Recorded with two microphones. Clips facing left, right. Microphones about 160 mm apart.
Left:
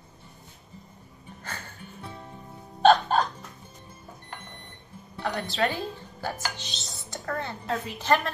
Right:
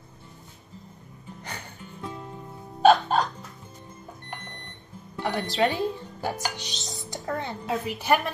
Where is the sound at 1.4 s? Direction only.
15° right (ahead or behind).